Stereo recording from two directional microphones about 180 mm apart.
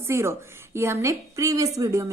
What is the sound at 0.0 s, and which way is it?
A woman's voice, 15° right (ahead or behind).